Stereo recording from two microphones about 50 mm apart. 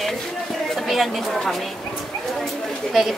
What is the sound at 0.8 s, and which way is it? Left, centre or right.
Speech, centre.